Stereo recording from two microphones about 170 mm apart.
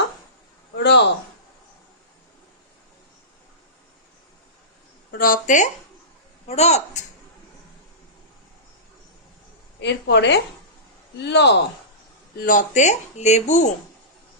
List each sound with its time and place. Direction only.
0.8 s a sound: 90° left
5.1 s speech: 55° left (ahead or behind)
6.5 s a man's voice: 40° left (ahead or behind)
9.8 s speech: 90° left
12.4 s speech: 50° left (ahead or behind)